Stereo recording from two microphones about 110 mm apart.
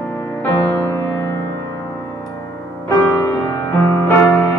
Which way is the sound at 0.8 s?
20° left (ahead or behind).